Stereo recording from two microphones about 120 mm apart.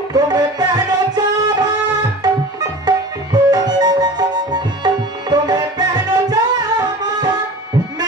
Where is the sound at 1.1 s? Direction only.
35° right (ahead or behind).